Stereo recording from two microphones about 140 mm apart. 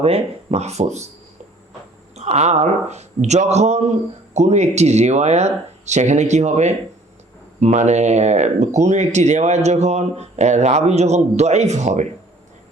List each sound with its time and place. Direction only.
0.0 s speech: 50° right (ahead or behind)
2.1 s speech: 50° right (ahead or behind)